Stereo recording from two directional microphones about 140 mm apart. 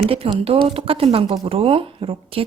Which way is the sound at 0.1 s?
45° right (ahead or behind).